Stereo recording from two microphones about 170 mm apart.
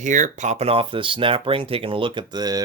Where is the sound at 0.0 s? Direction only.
45° right (ahead or behind).